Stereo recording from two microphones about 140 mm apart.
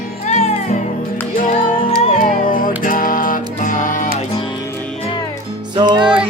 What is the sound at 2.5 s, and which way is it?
Music, 80° left.